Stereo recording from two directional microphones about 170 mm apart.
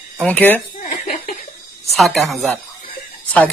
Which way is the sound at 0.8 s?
45° left (ahead or behind).